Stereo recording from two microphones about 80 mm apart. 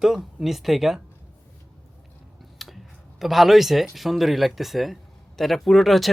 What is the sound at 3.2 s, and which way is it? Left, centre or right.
Speech, centre.